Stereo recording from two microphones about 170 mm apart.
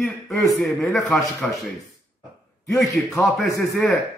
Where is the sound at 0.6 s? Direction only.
Centre (ahead or behind).